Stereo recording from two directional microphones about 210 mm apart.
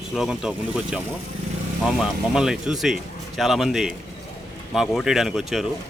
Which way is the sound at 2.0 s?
5° right (ahead or behind).